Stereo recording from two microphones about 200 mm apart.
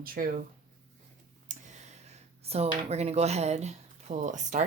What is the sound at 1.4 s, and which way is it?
Speech, 35° right (ahead or behind).